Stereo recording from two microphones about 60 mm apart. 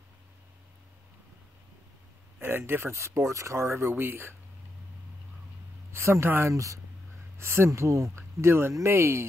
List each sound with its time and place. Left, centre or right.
2.4 s speech: right
5.9 s speech: right
6.5 s speech: right
7.3 s speech: right